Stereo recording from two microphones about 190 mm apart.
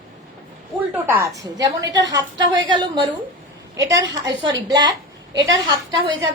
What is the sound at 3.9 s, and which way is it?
A woman's voice, 25° right (ahead or behind).